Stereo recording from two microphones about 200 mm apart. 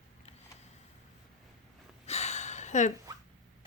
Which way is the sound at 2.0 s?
35° left (ahead or behind).